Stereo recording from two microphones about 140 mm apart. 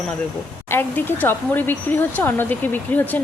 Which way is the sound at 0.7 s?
15° left (ahead or behind).